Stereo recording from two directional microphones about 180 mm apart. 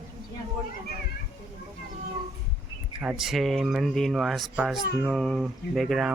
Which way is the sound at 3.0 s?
5° right (ahead or behind).